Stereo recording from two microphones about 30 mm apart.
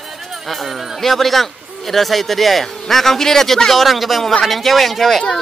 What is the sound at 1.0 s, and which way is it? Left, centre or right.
Speech, centre.